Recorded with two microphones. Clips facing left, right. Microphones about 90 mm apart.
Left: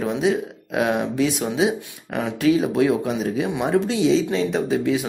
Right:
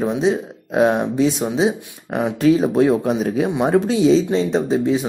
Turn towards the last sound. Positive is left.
turn(degrees=-30)  # may be behind; listen again after turning